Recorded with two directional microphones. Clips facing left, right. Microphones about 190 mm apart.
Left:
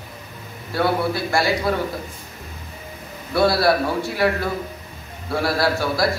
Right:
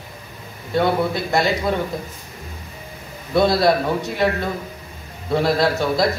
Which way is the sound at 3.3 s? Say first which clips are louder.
Right 1 dB; 20° right (ahead or behind).